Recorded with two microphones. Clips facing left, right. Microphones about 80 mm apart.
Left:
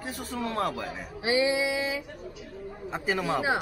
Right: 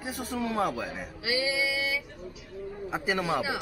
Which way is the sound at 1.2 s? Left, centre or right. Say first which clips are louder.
Left 4 dB; left.